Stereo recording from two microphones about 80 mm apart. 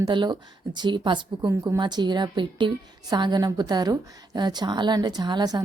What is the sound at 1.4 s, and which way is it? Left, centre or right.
Speech, right.